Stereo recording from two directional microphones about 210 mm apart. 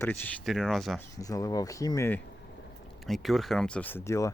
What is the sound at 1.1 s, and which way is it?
Speech, 15° left (ahead or behind).